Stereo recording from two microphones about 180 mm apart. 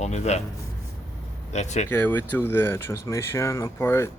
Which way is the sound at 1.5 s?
40° left (ahead or behind).